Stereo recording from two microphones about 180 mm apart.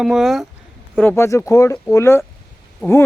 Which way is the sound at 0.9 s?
10° left (ahead or behind).